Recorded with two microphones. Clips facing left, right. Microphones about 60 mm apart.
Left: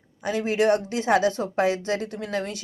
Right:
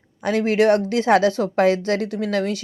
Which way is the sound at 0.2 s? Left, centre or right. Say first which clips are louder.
Right 5 dB; right.